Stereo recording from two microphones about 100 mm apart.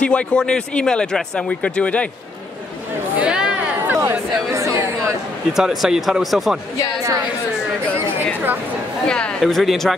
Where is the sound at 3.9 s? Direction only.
30° right (ahead or behind).